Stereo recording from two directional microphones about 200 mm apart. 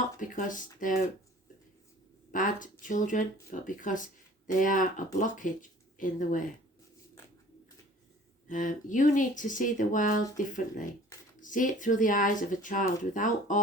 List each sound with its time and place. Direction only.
0.2 s speech: 40° left (ahead or behind)
2.3 s speech: 40° left (ahead or behind)
8.4 s speech: 40° left (ahead or behind)